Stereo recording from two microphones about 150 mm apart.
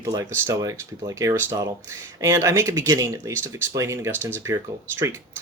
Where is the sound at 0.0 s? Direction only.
20° right (ahead or behind).